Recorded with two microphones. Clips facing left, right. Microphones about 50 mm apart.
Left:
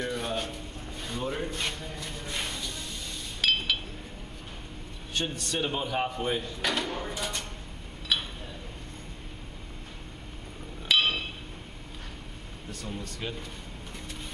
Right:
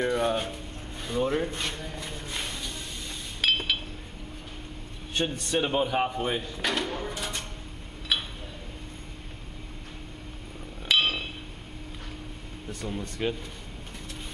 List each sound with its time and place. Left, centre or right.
0.0 s speech: centre
3.3 s chink: centre
5.1 s speech: centre
8.1 s a sound: centre
10.9 s a sound: centre
13.2 s speech: centre